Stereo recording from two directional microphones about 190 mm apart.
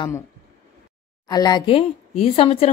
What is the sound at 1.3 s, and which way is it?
Speech, 20° left (ahead or behind).